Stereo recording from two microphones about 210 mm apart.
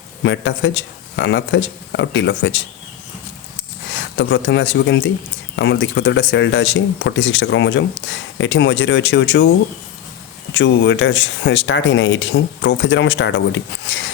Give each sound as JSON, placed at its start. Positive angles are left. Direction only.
{"t": 0.2, "sound": "speech", "side_deg": 60}
{"t": 3.9, "sound": "speech", "side_deg": 60}
{"t": 10.5, "sound": "speech", "side_deg": 60}